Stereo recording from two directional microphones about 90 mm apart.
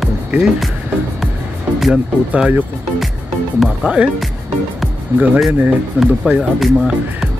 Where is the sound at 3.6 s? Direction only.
15° right (ahead or behind).